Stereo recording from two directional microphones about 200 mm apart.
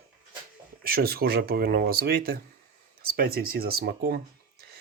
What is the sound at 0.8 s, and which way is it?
Speech, 50° right (ahead or behind).